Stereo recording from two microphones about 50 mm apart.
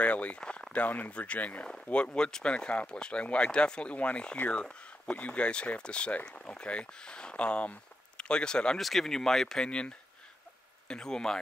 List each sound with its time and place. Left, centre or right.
0.0 s speech: left
0.4 s a sound: left
0.7 s speech: left
8.7 s speech: centre
9.7 s speech: left